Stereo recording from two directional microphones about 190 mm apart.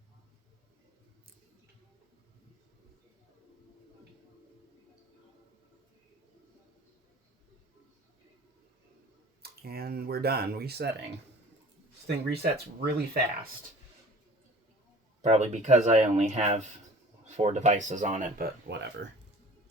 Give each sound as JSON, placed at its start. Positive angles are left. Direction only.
{"t": 9.4, "sound": "speech", "side_deg": -55}
{"t": 12.0, "sound": "speech", "side_deg": -60}
{"t": 15.2, "sound": "speech", "side_deg": -35}